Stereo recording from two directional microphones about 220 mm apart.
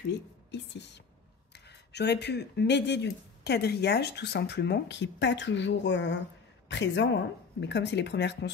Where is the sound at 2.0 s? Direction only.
50° left (ahead or behind).